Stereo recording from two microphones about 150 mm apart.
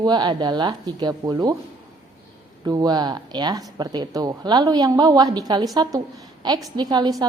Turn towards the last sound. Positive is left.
turn(degrees=-30)  # may be behind; listen again after turning